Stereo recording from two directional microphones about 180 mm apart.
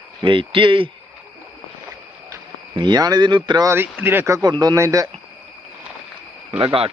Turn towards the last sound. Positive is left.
turn(degrees=-30)  # may be behind; listen again after turning